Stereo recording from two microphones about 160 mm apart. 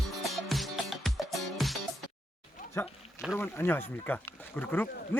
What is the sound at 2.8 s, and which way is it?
Speech, 15° left (ahead or behind).